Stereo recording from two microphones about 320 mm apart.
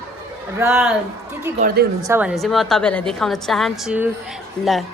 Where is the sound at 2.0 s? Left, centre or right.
Centre.